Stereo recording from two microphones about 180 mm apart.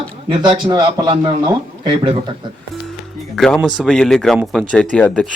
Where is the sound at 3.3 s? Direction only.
Centre (ahead or behind).